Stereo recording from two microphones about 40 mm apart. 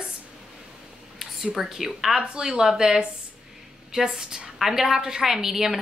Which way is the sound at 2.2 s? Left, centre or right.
Right.